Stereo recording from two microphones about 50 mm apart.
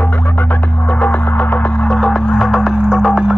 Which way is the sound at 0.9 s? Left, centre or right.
Left.